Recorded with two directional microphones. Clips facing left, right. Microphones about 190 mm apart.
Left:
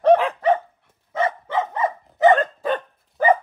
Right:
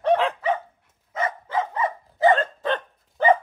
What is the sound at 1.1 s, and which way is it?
Dog, 25° left (ahead or behind).